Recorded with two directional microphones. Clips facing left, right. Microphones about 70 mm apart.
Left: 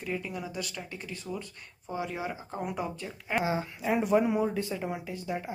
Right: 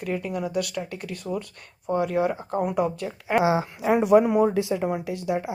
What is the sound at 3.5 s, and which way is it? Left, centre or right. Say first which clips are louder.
Speech: right 7 dB; right.